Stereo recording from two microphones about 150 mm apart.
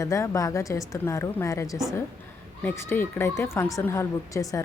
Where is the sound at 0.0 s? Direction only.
20° left (ahead or behind).